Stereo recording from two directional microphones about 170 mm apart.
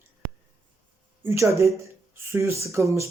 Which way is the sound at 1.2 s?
15° right (ahead or behind).